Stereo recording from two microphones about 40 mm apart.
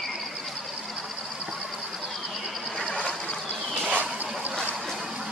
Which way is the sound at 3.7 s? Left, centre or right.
Right.